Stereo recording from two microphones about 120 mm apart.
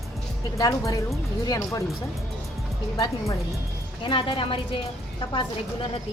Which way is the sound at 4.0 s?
45° left (ahead or behind).